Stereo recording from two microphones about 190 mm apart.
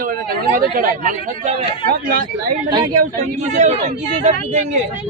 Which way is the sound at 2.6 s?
20° right (ahead or behind).